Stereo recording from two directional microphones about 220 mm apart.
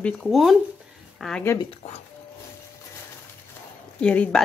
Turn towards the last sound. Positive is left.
turn(degrees=5)  # may be behind; listen again after turning